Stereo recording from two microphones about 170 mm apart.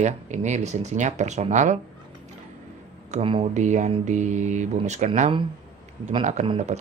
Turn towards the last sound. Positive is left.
turn(degrees=-35)  # may be behind; listen again after turning